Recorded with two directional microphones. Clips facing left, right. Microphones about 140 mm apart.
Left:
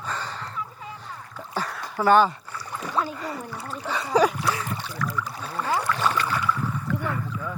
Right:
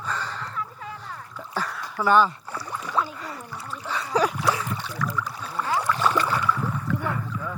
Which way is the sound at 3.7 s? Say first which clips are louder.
Left 1 dB; 65° left (ahead or behind).